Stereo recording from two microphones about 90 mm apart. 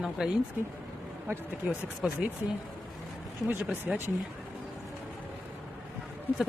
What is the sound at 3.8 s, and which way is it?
Speech, 25° right (ahead or behind).